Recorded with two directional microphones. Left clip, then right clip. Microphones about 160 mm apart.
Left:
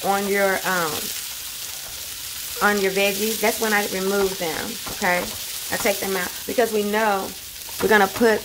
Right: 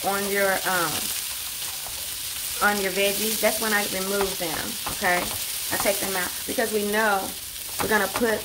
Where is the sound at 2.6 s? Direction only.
50° left (ahead or behind).